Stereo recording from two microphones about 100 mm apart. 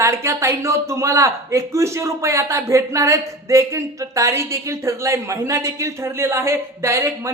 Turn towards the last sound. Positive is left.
turn(degrees=-30)  # may be behind; listen again after turning